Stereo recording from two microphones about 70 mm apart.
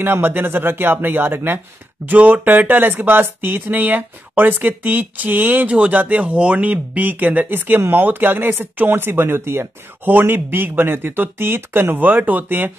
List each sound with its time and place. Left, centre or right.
0.0 s speech: right